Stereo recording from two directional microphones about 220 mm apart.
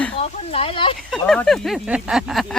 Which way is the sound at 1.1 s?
Centre (ahead or behind).